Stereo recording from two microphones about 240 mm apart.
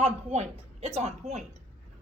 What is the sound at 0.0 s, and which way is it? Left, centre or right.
A woman's voice, right.